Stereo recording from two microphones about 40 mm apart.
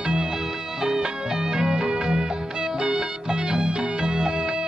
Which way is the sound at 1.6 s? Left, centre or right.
Centre.